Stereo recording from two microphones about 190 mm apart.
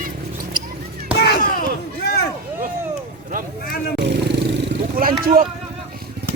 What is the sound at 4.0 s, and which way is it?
Music, 65° right (ahead or behind).